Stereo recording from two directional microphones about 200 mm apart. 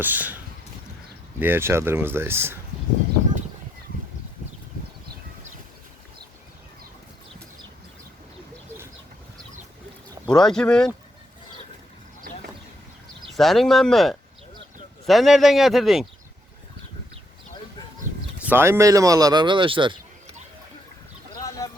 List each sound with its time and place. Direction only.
0.0 s speech: 10° right (ahead or behind)
1.4 s speech: 10° right (ahead or behind)
10.2 s speech: 5° left (ahead or behind)
13.3 s speech: centre (ahead or behind)
18.4 s speech: 10° right (ahead or behind)
21.3 s chicken: 15° left (ahead or behind)